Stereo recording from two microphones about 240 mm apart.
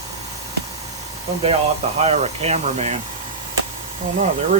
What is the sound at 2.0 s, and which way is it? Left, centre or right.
Speech, right.